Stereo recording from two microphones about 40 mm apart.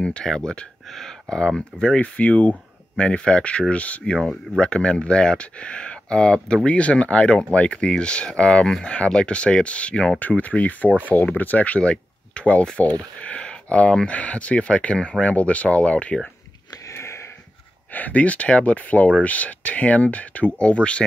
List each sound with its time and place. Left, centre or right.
0.2 s speech: centre
2.0 s speech: left
3.7 s speech: left
4.6 s speech: left
10.1 s speech: left
17.9 s speech: left